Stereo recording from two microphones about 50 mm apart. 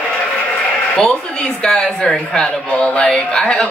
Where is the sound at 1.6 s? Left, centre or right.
Centre.